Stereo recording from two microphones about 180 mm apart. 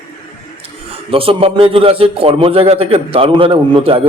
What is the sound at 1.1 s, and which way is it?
A man's voice, 30° right (ahead or behind).